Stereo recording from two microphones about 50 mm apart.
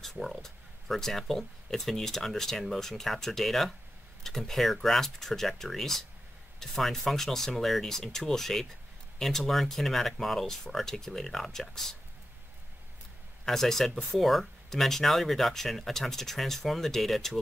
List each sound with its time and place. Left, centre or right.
0.0 s speech: centre
13.5 s speech: centre